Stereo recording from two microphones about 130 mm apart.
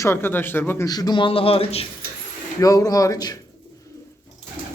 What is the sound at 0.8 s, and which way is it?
Speech, 30° left (ahead or behind).